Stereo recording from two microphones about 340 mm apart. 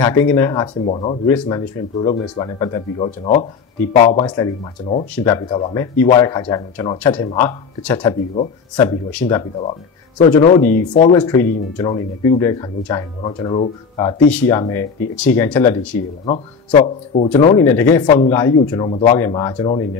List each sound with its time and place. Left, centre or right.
0.0 s speech: centre